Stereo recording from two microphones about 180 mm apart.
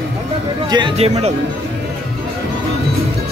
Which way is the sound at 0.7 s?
25° right (ahead or behind).